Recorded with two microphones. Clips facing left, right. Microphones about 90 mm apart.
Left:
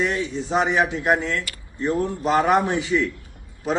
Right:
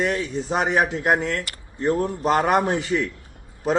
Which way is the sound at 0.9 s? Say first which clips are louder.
Even; 40° right (ahead or behind).